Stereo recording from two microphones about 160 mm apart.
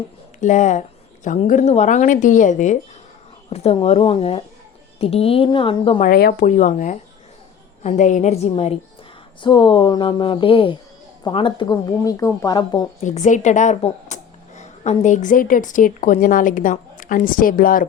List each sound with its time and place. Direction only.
0.3 s a woman's voice: 50° left (ahead or behind)
3.5 s speech: 40° left (ahead or behind)
6.0 s a woman's voice: 70° left (ahead or behind); by 12.9 s 25° left (ahead or behind)
13.1 s a woman's voice: 50° left (ahead or behind)